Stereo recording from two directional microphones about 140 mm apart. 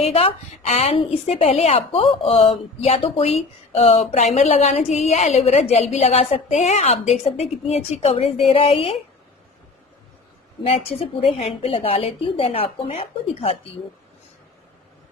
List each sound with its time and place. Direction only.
0.0 s a woman's voice: 45° left (ahead or behind)
10.6 s a woman's voice: 45° left (ahead or behind)